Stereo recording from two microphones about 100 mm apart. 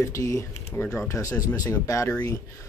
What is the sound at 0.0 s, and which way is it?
Speech, 30° left (ahead or behind).